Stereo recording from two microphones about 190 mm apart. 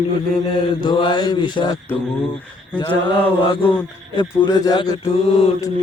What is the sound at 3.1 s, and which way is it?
Speech, 25° left (ahead or behind).